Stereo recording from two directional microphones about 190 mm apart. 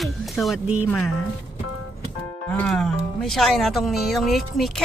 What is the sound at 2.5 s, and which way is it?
Speech, 5° left (ahead or behind).